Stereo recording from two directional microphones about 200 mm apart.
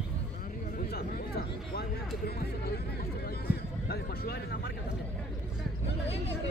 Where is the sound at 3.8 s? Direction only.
50° left (ahead or behind).